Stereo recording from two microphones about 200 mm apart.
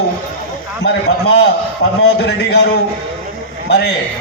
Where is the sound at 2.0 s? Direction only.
55° left (ahead or behind).